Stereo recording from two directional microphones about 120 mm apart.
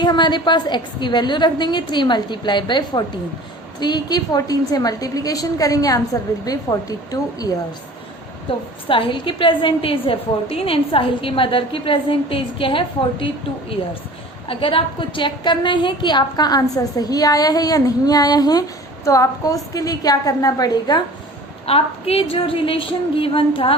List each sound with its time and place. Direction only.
0.0 s a woman's voice: 40° left (ahead or behind)
8.9 s a woman's voice: 45° left (ahead or behind)
21.7 s a woman's voice: 55° left (ahead or behind)